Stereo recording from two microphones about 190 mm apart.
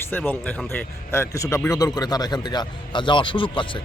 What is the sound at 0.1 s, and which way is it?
Speech, 10° left (ahead or behind).